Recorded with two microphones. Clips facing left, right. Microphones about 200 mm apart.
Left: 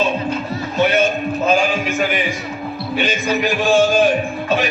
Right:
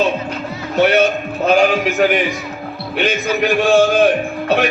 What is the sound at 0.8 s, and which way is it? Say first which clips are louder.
A man's voice: right 3 dB; 65° right (ahead or behind).